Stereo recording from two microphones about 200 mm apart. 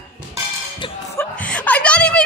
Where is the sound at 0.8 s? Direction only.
25° left (ahead or behind).